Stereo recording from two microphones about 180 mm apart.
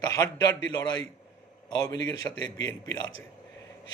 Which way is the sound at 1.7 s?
20° left (ahead or behind).